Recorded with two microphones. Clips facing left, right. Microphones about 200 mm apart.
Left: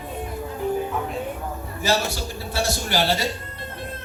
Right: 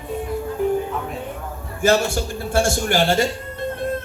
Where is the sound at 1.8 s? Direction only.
50° right (ahead or behind).